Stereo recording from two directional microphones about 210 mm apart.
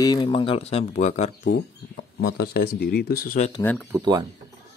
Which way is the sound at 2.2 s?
45° left (ahead or behind).